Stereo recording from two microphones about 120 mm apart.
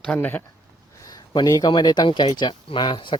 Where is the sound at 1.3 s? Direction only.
35° left (ahead or behind).